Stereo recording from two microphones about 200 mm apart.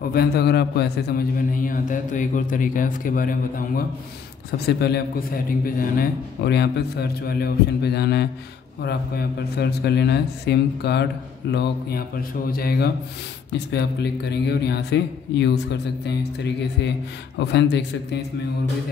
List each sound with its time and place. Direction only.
0.1 s a man's voice: 50° left (ahead or behind)
4.5 s a man's voice: 55° left (ahead or behind)
17.4 s speech: 60° left (ahead or behind)